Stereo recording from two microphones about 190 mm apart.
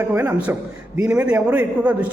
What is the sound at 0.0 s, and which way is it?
A man's voice, 10° right (ahead or behind).